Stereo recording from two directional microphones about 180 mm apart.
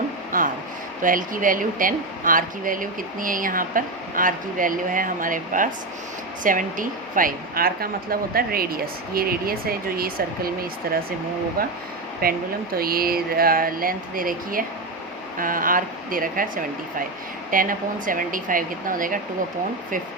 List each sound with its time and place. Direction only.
0.3 s a sound: 50° right (ahead or behind)
1.0 s a woman's voice: 50° right (ahead or behind)
12.2 s a woman's voice: 55° right (ahead or behind)